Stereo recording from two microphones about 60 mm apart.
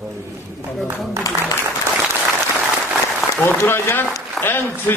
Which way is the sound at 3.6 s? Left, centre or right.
Left.